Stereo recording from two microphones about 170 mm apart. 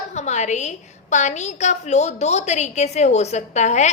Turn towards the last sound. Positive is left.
turn(degrees=45)  # may be behind; listen again after turning